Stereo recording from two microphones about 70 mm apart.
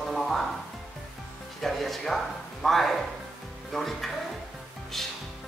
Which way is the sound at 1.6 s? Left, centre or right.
Centre.